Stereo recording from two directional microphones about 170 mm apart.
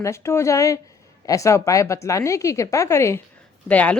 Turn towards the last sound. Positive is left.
turn(degrees=10)  # may be behind; listen again after turning